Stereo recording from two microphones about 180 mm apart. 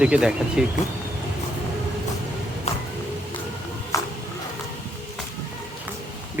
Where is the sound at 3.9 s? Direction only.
20° left (ahead or behind).